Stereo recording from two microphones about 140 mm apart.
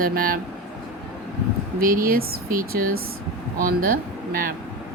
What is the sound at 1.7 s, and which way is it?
Speech, 90° right.